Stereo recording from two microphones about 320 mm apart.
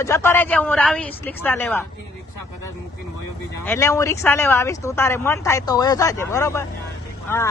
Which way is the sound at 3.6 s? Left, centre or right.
Centre.